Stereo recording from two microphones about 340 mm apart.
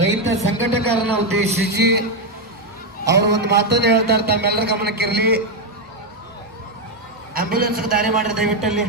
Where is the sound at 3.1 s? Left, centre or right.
Right.